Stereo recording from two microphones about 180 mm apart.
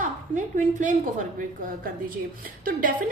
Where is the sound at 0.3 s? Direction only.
45° right (ahead or behind).